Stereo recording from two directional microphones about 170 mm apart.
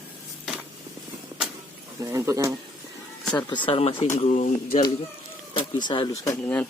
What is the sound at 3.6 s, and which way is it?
Speech, 30° left (ahead or behind).